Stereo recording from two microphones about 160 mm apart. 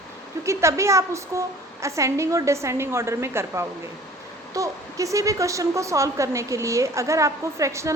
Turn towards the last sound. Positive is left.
turn(degrees=-20)  # may be behind; listen again after turning